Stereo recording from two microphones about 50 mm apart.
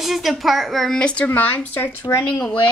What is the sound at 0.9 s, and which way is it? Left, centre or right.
Speech, centre.